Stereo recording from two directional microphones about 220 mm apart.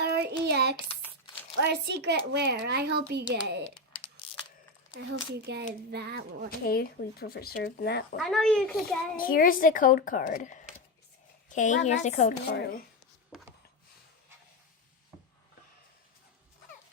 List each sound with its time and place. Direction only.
0.0 s a sound: 50° right (ahead or behind)
1.7 s a child's voice: 50° right (ahead or behind)
4.9 s a child's voice: 50° right (ahead or behind)
6.7 s speech: 45° left (ahead or behind)
8.2 s a child's voice: centre (ahead or behind)
9.1 s a woman's voice: 40° left (ahead or behind)
12.5 s speech: 45° left (ahead or behind)